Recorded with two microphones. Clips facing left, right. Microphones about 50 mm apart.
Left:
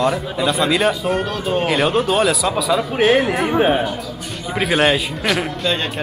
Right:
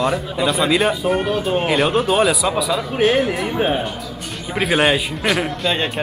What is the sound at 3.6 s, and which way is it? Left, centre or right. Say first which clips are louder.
Speech: left 4 dB; centre.